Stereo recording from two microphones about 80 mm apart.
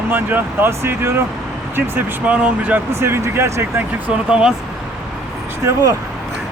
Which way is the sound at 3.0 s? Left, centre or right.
Right.